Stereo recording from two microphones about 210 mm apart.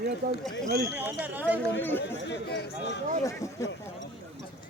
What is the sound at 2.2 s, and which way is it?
Speech, 55° left (ahead or behind).